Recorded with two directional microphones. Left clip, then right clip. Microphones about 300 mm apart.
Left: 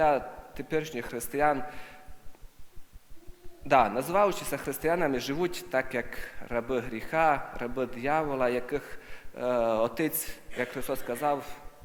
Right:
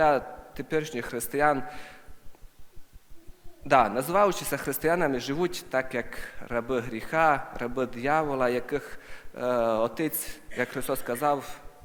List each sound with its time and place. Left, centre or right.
0.0 s a man's voice: centre
3.7 s a man's voice: centre